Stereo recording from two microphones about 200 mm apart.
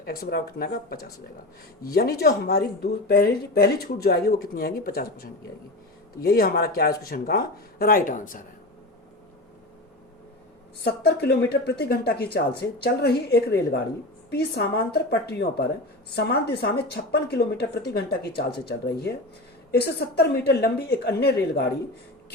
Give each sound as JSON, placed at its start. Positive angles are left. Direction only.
{"t": 0.0, "sound": "speech", "side_deg": 50}
{"t": 10.8, "sound": "speech", "side_deg": 55}
{"t": 19.7, "sound": "speech", "side_deg": 55}